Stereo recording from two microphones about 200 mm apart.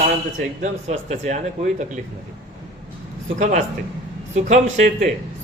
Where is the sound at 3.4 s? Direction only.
40° right (ahead or behind).